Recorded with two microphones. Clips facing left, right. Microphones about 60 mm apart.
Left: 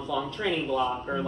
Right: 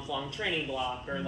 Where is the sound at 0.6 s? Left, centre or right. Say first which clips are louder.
Left 7 dB; left.